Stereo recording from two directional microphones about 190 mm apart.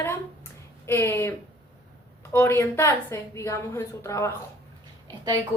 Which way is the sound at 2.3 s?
15° left (ahead or behind).